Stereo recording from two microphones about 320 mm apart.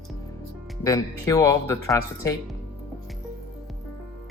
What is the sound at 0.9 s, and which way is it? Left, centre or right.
Speech, centre.